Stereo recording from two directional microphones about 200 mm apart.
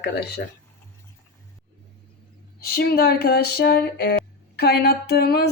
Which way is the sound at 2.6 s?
50° left (ahead or behind).